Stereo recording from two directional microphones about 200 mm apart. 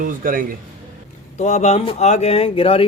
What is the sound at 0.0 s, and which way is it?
Speech, 45° right (ahead or behind).